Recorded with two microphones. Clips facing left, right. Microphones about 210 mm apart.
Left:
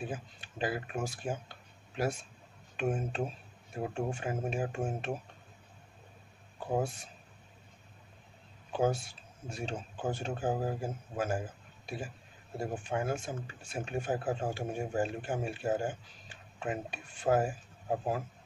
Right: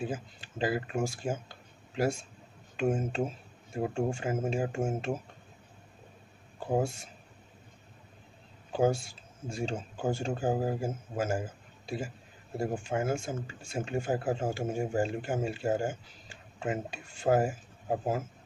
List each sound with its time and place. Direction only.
0.1 s speech: 25° right (ahead or behind)
3.3 s a sound: 25° right (ahead or behind)
4.1 s speech: 25° right (ahead or behind)
6.8 s speech: 25° right (ahead or behind)
8.8 s speech: 25° right (ahead or behind)